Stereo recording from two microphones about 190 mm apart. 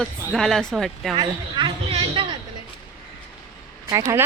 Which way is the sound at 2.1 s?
25° right (ahead or behind).